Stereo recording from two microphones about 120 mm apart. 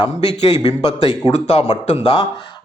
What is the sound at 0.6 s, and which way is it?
A man's voice, 50° left (ahead or behind).